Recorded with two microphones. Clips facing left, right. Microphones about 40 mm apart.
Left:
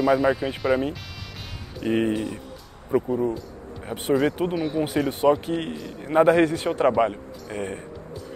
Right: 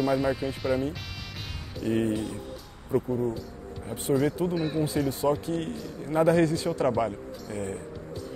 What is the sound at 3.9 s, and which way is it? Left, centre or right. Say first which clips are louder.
Speech: left 5 dB; left.